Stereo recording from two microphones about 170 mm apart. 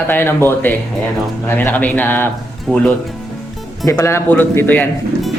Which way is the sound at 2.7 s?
Centre (ahead or behind).